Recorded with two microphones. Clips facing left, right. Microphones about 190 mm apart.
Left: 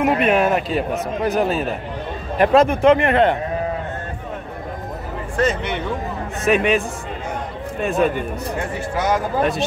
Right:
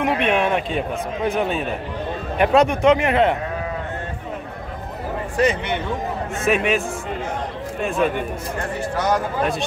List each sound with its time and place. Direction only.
0.0 s speech: 5° left (ahead or behind)
6.4 s speech: centre (ahead or behind)
7.8 s speech: centre (ahead or behind)